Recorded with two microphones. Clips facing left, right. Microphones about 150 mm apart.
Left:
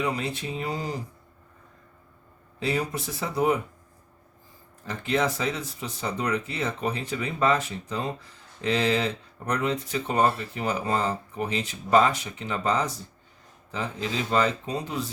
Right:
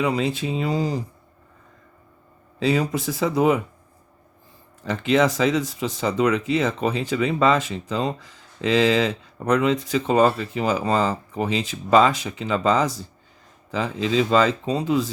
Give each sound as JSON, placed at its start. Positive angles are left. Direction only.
{"t": 0.0, "sound": "speech", "side_deg": -90}
{"t": 2.6, "sound": "speech", "side_deg": -90}
{"t": 4.9, "sound": "speech", "side_deg": -90}